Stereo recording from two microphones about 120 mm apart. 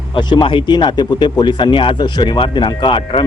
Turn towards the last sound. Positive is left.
turn(degrees=45)  # may be behind; listen again after turning